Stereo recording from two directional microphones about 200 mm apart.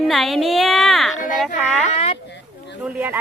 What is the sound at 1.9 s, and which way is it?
Speech, 30° left (ahead or behind).